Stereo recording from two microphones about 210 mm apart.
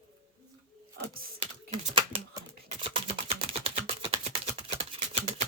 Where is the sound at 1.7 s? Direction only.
25° right (ahead or behind).